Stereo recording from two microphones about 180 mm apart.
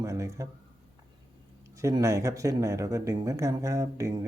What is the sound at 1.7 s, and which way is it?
Speech, 15° right (ahead or behind).